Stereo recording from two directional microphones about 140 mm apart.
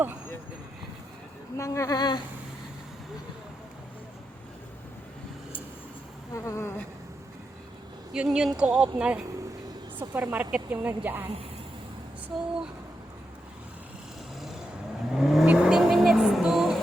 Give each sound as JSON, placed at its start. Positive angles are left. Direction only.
{"t": 1.5, "sound": "speech", "side_deg": 20}
{"t": 6.3, "sound": "speech", "side_deg": 20}
{"t": 8.1, "sound": "speech", "side_deg": -5}
{"t": 12.3, "sound": "speech", "side_deg": -5}
{"t": 15.1, "sound": "vehicle", "side_deg": 0}